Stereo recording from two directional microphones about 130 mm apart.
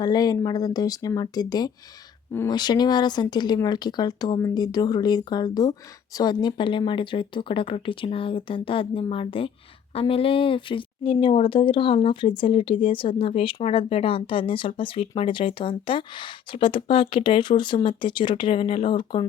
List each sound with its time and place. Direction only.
0.0 s speech: 30° left (ahead or behind)